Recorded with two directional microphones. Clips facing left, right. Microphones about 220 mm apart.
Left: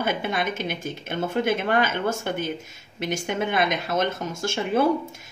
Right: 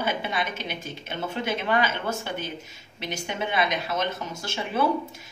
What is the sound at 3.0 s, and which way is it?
A woman's voice, 50° left (ahead or behind).